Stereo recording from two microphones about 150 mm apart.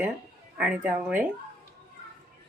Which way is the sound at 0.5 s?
10° right (ahead or behind).